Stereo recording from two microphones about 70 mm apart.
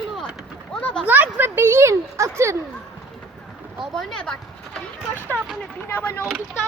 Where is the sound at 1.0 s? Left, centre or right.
Right.